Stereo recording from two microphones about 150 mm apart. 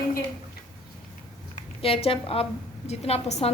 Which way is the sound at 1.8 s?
40° left (ahead or behind).